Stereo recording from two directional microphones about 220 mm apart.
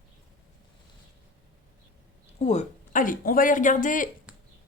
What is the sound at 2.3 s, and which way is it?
Speech, 30° left (ahead or behind).